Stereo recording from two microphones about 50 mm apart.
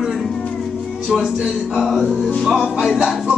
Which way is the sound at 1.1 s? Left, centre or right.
Centre.